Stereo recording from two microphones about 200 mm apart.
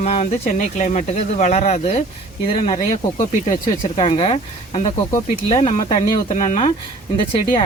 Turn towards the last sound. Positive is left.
turn(degrees=25)  # may be behind; listen again after turning